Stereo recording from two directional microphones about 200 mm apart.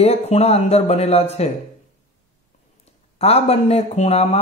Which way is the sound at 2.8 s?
30° left (ahead or behind).